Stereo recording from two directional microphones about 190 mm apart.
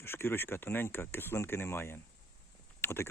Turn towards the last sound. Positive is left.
turn(degrees=15)  # may be behind; listen again after turning